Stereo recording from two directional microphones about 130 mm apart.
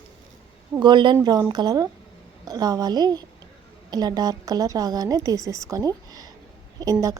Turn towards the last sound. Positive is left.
turn(degrees=-30)  # may be behind; listen again after turning